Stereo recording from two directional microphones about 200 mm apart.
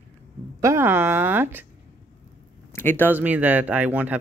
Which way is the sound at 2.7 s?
10° left (ahead or behind).